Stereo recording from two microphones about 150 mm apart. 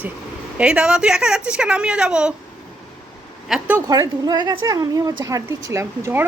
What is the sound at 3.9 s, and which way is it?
A woman's voice, 25° right (ahead or behind).